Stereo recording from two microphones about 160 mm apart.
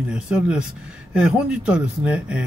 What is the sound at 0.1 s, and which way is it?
Speech, 5° right (ahead or behind).